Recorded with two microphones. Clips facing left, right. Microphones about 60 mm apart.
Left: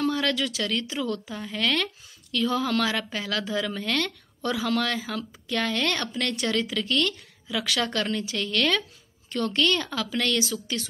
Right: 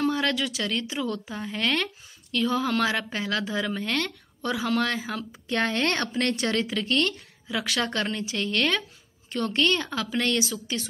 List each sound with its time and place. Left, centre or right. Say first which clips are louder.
0.0 s a woman's voice: even; right